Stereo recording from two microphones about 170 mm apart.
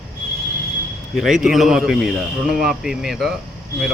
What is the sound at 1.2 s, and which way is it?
Speech, 5° right (ahead or behind).